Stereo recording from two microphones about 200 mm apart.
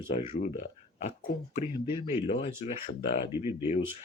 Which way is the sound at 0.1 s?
35° left (ahead or behind).